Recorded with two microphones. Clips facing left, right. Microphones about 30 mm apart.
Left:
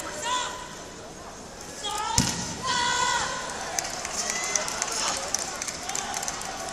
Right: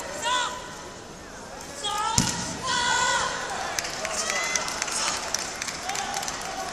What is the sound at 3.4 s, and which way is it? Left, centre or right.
Run, right.